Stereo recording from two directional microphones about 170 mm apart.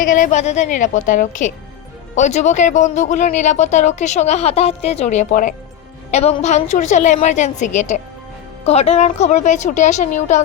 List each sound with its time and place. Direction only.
0.0 s speech: 50° left (ahead or behind)
6.1 s a woman's voice: 40° left (ahead or behind)